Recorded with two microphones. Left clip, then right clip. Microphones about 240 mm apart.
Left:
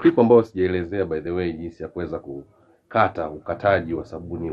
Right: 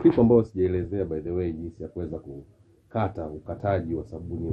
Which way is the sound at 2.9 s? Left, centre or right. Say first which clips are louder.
Left 9 dB; centre.